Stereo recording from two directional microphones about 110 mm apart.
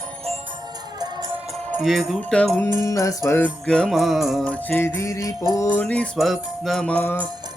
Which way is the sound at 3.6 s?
5° left (ahead or behind).